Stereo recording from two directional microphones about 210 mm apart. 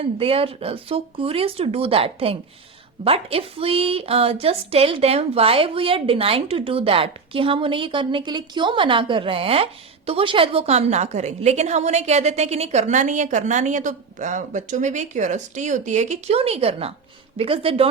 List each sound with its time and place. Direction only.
0.0 s a woman's voice: 25° right (ahead or behind)